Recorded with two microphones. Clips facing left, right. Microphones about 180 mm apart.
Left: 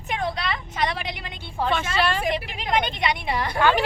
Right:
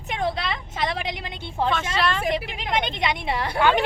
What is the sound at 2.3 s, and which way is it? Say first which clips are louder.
Speech: left 1 dB; 20° right (ahead or behind).